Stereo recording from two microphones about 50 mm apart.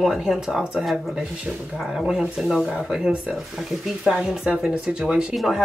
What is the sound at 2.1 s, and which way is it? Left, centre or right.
Speech, centre.